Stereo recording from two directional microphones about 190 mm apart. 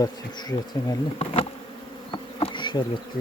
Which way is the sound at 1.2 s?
30° left (ahead or behind).